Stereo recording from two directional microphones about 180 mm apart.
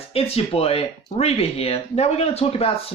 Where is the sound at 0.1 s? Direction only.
35° left (ahead or behind).